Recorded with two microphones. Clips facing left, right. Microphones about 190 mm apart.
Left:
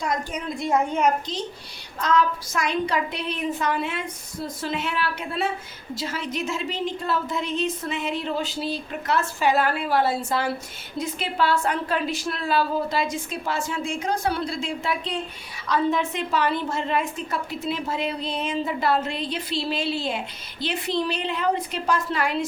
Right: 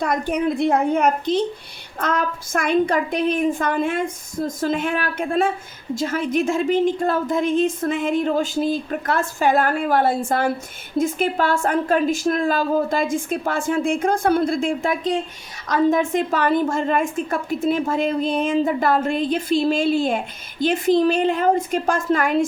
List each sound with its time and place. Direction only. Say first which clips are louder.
0.0 s a woman's voice: right 7 dB; 60° right (ahead or behind)